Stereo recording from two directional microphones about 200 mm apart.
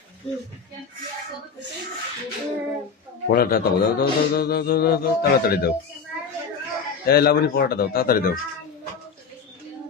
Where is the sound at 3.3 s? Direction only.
50° left (ahead or behind).